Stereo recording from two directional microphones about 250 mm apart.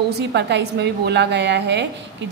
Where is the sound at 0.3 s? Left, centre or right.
Right.